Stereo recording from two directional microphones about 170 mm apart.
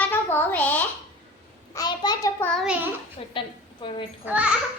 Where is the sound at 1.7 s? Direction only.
25° left (ahead or behind).